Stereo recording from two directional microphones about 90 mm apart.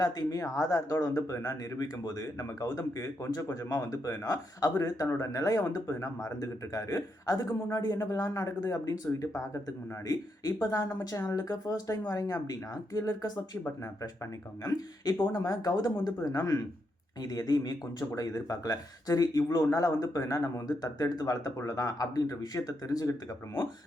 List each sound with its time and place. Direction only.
0.0 s speech: 45° left (ahead or behind)
14.6 s speech: 45° left (ahead or behind)